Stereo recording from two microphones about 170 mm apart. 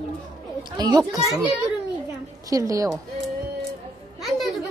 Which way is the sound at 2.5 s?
20° right (ahead or behind).